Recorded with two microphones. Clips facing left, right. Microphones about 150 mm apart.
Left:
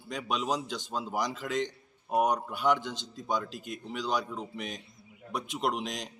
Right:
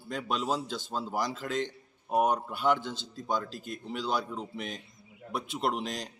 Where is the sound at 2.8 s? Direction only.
15° left (ahead or behind).